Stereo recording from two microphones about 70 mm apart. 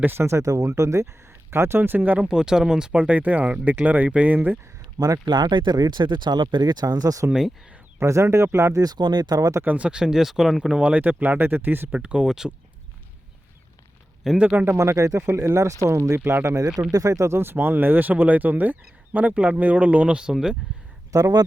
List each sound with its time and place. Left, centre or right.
0.0 s speech: right
2.1 s speech: centre
3.0 s speech: right
4.9 s speech: right
7.9 s speech: right
8.8 s speech: right
9.6 s speech: centre
11.9 s speech: centre
14.3 s speech: right
14.7 s speech: right
15.3 s speech: right; by 20.6 s centre
21.1 s speech: right